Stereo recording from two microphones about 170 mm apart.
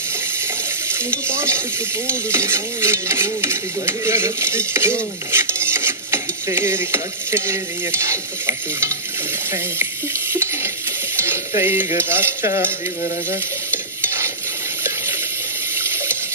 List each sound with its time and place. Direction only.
1.3 s stir: 15° right (ahead or behind)
10.3 s water: 15° right (ahead or behind)
11.1 s speech: 15° right (ahead or behind)
15.7 s water: 15° right (ahead or behind)